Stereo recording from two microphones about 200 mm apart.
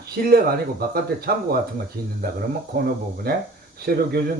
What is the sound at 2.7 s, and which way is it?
Speech, 45° right (ahead or behind).